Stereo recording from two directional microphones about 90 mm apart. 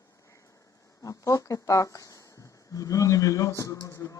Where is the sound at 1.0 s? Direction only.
40° left (ahead or behind).